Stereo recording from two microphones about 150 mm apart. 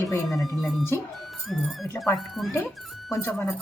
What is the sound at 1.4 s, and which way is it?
Speech, centre (ahead or behind).